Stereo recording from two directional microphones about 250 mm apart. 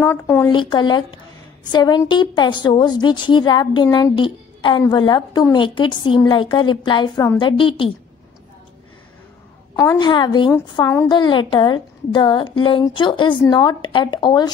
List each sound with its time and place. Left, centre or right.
0.0 s a woman's voice: centre
9.8 s a woman's voice: centre